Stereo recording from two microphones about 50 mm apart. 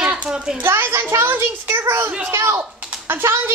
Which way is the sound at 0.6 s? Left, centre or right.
Right.